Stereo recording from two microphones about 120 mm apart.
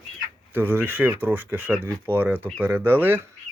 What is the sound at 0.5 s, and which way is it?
Speech, 15° right (ahead or behind).